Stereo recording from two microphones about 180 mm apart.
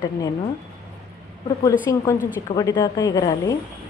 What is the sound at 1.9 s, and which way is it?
Speech, 15° left (ahead or behind).